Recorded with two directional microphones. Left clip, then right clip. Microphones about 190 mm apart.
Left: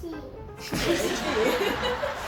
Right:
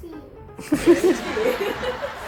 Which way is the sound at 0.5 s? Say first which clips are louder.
Right 8 dB; 25° right (ahead or behind).